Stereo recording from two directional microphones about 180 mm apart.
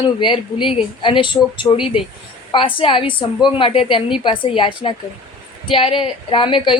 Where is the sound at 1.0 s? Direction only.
25° left (ahead or behind).